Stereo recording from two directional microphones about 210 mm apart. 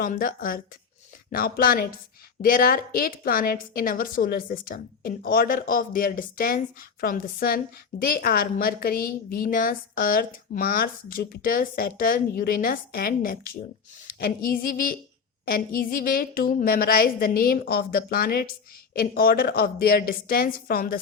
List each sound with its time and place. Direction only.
0.0 s a woman's voice: 40° left (ahead or behind)